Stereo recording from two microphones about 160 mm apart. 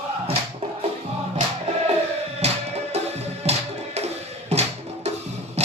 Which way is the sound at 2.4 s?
40° right (ahead or behind).